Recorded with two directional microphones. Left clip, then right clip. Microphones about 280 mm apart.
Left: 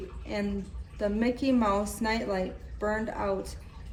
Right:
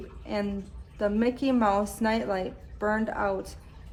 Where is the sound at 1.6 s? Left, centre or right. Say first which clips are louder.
Right 3 dB; right.